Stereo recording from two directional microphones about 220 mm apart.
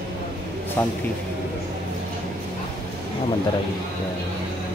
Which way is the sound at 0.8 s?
10° left (ahead or behind).